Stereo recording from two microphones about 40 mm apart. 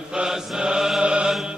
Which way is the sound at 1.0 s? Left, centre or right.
Right.